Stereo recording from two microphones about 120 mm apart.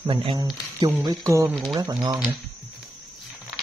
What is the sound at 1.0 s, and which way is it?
Speech, 25° right (ahead or behind).